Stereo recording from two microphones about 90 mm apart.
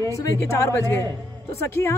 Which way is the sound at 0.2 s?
35° left (ahead or behind).